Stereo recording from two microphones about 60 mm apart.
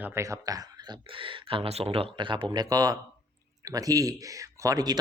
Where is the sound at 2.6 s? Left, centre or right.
Right.